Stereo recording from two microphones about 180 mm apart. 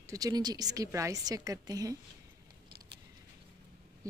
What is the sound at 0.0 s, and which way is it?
A woman's voice, 20° right (ahead or behind).